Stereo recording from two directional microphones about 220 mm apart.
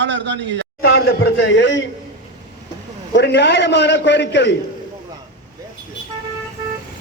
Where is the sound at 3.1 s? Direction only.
50° left (ahead or behind).